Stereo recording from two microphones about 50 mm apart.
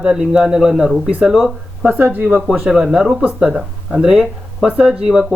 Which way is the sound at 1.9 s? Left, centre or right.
Right.